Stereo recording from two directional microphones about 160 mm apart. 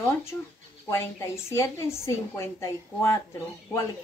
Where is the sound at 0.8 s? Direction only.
15° left (ahead or behind).